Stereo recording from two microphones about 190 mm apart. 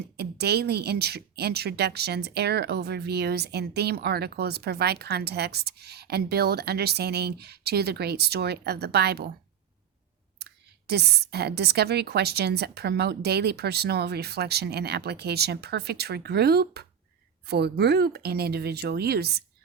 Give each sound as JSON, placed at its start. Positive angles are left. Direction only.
{"t": 0.2, "sound": "speech", "side_deg": -60}
{"t": 10.3, "sound": "speech", "side_deg": -60}